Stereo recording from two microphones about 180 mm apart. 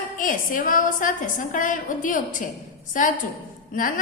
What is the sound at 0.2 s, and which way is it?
A woman's voice, 50° left (ahead or behind).